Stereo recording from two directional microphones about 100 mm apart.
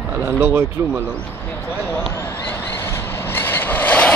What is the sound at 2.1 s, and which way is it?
Vehicle, 20° left (ahead or behind).